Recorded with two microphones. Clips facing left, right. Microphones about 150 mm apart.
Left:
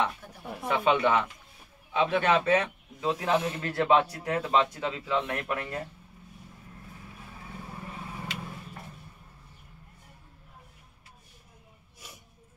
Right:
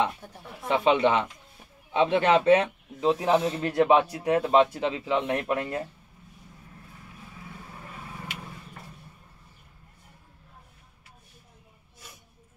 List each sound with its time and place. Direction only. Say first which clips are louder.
0.7 s speech: right 3 dB; 20° right (ahead or behind)